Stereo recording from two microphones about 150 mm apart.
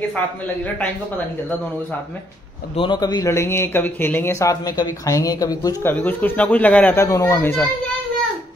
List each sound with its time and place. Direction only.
2.7 s speech: 35° left (ahead or behind)